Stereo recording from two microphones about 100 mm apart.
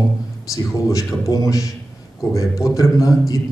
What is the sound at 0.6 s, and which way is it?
A man's voice, 35° left (ahead or behind).